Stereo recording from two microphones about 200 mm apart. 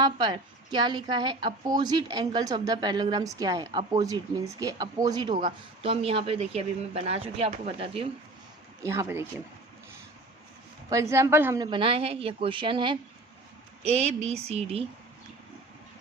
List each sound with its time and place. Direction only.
0.0 s a woman's voice: 20° right (ahead or behind)
8.8 s speech: 15° right (ahead or behind)
10.8 s a woman's voice: 15° right (ahead or behind); by 14.8 s 30° right (ahead or behind)